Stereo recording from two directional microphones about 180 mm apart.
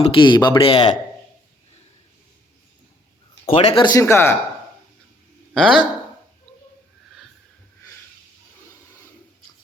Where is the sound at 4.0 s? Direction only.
15° left (ahead or behind).